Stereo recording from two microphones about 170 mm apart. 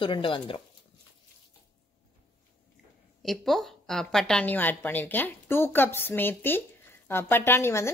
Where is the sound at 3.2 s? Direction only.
Centre (ahead or behind).